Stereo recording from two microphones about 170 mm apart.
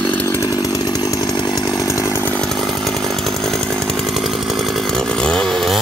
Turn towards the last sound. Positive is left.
turn(degrees=0)  # may be behind; listen again after turning